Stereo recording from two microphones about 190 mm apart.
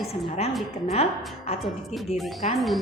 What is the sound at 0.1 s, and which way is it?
Speech, 35° left (ahead or behind).